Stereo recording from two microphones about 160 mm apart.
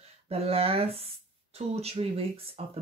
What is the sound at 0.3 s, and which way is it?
Speech, 40° right (ahead or behind).